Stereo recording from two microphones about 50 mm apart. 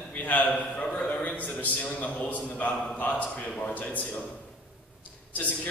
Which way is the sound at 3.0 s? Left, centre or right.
Left.